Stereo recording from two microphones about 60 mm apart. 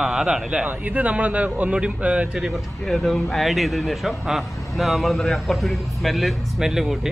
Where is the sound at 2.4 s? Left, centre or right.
Centre.